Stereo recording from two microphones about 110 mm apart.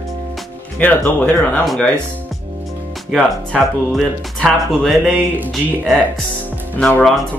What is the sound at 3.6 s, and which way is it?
Speech, centre (ahead or behind).